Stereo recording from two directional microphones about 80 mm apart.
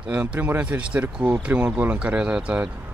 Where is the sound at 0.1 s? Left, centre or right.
Right.